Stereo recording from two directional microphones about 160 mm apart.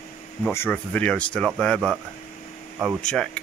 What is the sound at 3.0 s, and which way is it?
Speech, 5° left (ahead or behind).